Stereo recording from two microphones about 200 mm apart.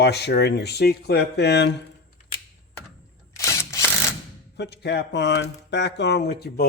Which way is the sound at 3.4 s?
15° left (ahead or behind).